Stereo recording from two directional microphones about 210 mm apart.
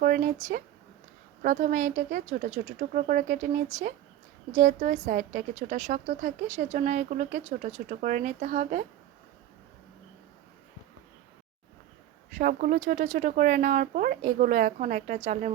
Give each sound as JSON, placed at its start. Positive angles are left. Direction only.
{"t": 0.0, "sound": "a woman's voice", "side_deg": -40}
{"t": 12.3, "sound": "a woman's voice", "side_deg": -40}